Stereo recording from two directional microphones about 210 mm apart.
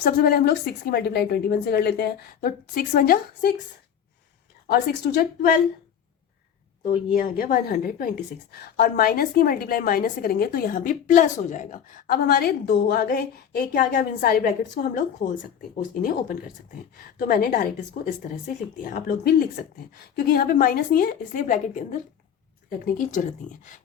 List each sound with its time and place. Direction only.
0.0 s a woman's voice: 45° left (ahead or behind)
4.7 s a woman's voice: 50° left (ahead or behind)
7.1 s a woman's voice: 40° left (ahead or behind)
17.2 s a woman's voice: 45° left (ahead or behind)